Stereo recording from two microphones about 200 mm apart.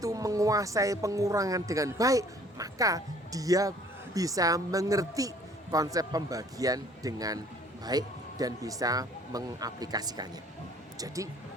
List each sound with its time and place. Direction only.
0.0 s speech: 15° right (ahead or behind)